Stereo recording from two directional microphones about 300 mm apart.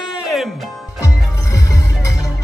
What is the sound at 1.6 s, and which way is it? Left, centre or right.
Music, centre.